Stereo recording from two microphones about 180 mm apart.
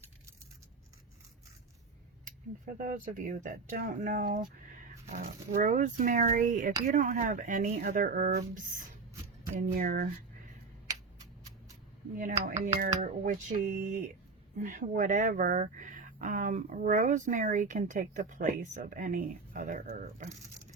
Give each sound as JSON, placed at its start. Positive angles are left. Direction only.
{"t": 2.7, "sound": "speech", "side_deg": -45}
{"t": 9.6, "sound": "speech", "side_deg": -50}
{"t": 12.1, "sound": "speech", "side_deg": -45}